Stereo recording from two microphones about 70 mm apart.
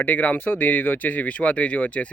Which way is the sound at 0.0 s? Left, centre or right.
Left.